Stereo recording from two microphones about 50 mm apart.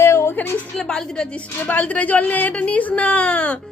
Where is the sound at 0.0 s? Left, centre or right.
Left.